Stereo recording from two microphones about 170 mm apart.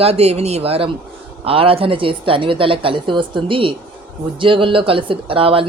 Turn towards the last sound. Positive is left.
turn(degrees=-35)  # may be behind; listen again after turning